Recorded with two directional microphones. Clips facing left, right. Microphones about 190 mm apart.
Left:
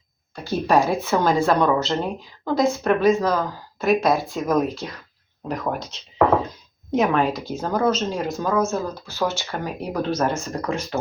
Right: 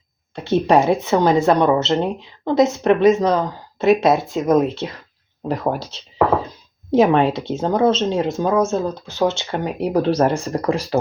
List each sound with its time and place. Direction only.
0.3 s speech: 25° right (ahead or behind)
6.9 s speech: 30° right (ahead or behind)